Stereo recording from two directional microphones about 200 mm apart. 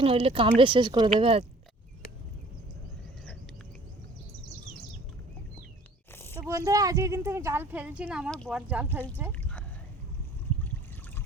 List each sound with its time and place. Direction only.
0.0 s speech: 30° right (ahead or behind)
6.1 s a sound: 10° left (ahead or behind)
6.5 s speech: 15° right (ahead or behind)